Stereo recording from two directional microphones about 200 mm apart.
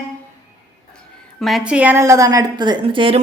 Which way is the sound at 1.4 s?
Centre (ahead or behind).